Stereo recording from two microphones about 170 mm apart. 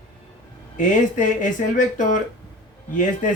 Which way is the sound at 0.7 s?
50° left (ahead or behind).